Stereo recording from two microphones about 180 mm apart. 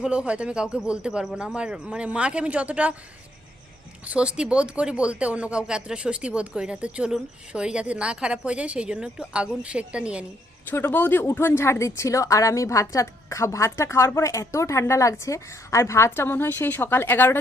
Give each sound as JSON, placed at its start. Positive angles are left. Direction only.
{"t": 0.0, "sound": "speech", "side_deg": -5}
{"t": 4.0, "sound": "speech", "side_deg": -5}
{"t": 10.7, "sound": "speech", "side_deg": 10}